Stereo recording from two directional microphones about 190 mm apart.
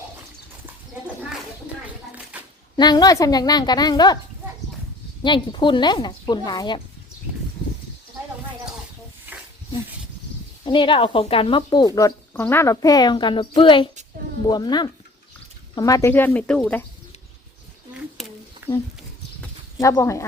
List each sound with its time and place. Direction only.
2.3 s a sound: 5° right (ahead or behind)
2.7 s speech: 20° left (ahead or behind)
5.2 s speech: 25° left (ahead or behind)
9.3 s dog: 10° right (ahead or behind)
10.7 s speech: 25° left (ahead or behind)
11.9 s speech: 15° left (ahead or behind)
18.2 s a sound: centre (ahead or behind)
18.6 s a sound: 10° right (ahead or behind)
19.8 s speech: 15° left (ahead or behind)